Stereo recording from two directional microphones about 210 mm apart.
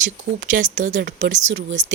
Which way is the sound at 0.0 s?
40° right (ahead or behind).